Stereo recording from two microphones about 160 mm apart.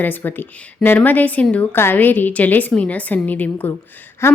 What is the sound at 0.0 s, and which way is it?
Speech, 10° left (ahead or behind).